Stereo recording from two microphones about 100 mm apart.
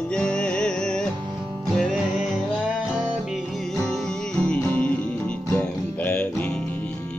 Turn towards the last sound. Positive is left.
turn(degrees=15)  # may be behind; listen again after turning